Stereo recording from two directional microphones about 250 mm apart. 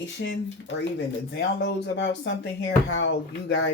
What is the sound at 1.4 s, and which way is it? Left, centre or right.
Speech, left.